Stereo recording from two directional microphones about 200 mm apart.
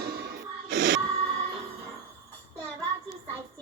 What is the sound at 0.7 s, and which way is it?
Music, 70° right (ahead or behind).